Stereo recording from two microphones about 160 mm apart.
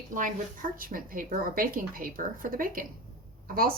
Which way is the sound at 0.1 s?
55° right (ahead or behind).